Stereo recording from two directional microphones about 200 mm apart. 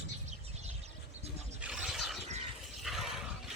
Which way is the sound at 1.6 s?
5° right (ahead or behind).